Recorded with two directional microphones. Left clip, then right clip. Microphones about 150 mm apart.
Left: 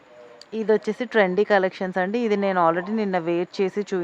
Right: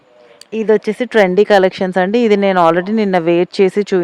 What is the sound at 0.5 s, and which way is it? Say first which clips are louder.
A woman's voice: right 8 dB; 45° right (ahead or behind).